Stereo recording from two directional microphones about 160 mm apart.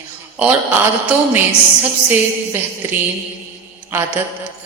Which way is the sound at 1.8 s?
10° right (ahead or behind).